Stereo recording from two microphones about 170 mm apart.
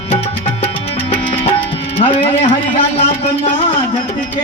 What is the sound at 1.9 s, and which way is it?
Speech, 35° left (ahead or behind).